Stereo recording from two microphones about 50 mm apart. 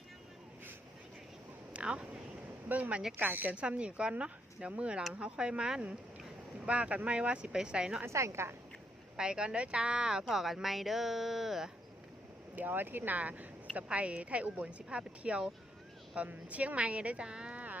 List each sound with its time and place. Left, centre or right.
1.7 s a sound: right
2.6 s speech: right
3.5 s speech: right
8.0 s a woman's voice: right
9.1 s speech: centre
12.5 s speech: right